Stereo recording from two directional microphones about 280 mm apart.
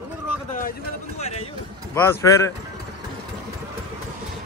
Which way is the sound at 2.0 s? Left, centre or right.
Centre.